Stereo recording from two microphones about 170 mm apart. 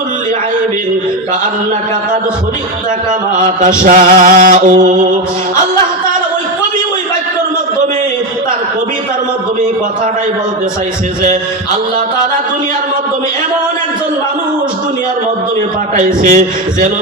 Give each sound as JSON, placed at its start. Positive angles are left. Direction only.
{"t": 3.3, "sound": "music", "side_deg": -50}
{"t": 16.0, "sound": "music", "side_deg": -45}